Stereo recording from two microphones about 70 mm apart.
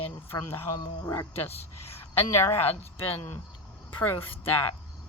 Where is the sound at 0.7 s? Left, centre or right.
Left.